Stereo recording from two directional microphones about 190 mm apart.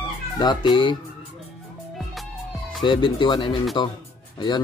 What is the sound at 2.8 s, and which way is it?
Speech, 25° left (ahead or behind).